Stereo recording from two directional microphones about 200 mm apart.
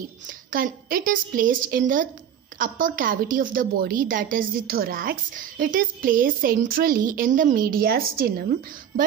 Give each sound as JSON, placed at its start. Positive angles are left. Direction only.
{"t": 0.5, "sound": "a woman's voice", "side_deg": -45}